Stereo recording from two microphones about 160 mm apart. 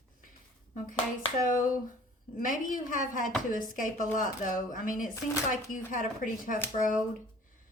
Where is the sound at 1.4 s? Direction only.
55° left (ahead or behind).